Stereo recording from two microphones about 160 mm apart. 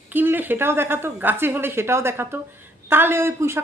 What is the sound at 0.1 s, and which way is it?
Speech, 10° right (ahead or behind).